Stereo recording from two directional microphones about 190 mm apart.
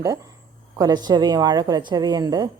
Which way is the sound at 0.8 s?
20° right (ahead or behind).